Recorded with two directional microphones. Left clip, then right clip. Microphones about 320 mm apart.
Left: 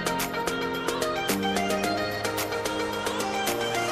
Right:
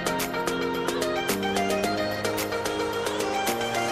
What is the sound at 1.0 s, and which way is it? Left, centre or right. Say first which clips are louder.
Music: even; centre.